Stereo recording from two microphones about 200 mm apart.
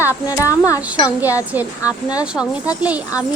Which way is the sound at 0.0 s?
15° left (ahead or behind).